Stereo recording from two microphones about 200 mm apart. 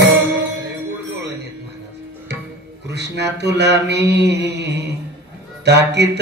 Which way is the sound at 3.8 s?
55° right (ahead or behind).